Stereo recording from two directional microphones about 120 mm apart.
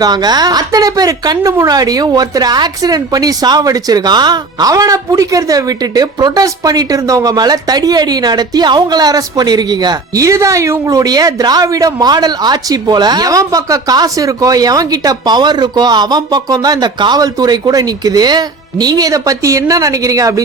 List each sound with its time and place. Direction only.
0.0 s speech: 35° right (ahead or behind)